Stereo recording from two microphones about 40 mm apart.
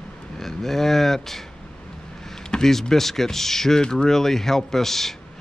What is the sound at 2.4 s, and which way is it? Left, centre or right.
Speech, centre.